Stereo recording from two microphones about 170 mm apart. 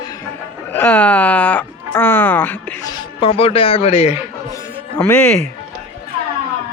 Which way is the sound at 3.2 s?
35° left (ahead or behind).